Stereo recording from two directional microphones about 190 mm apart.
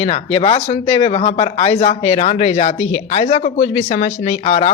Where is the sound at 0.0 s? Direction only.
30° left (ahead or behind).